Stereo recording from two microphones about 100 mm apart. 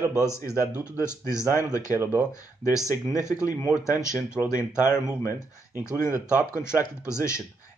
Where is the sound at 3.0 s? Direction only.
10° right (ahead or behind).